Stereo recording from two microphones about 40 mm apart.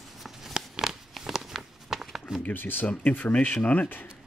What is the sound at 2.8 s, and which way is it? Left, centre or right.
Speech, left.